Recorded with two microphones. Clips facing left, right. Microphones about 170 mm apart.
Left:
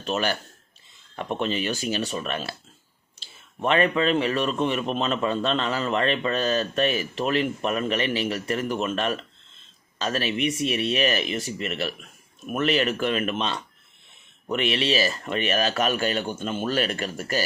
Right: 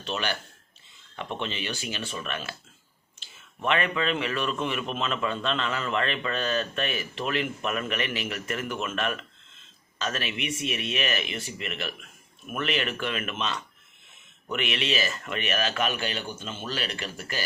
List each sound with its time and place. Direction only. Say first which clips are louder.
0.0 s a man's voice: left 5 dB; 45° left (ahead or behind)